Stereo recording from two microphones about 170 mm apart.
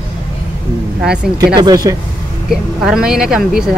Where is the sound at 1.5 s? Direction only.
25° right (ahead or behind).